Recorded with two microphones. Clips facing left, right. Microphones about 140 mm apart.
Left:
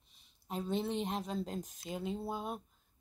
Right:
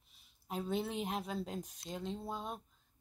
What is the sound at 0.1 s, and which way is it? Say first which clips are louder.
Speech: left 1 dB; centre (ahead or behind).